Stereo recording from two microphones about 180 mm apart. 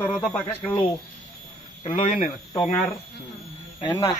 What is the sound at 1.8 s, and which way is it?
Speech, 35° left (ahead or behind).